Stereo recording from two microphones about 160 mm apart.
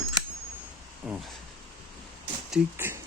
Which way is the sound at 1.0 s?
5° right (ahead or behind).